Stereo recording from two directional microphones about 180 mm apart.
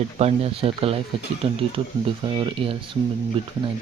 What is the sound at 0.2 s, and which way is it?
Speech, 35° right (ahead or behind).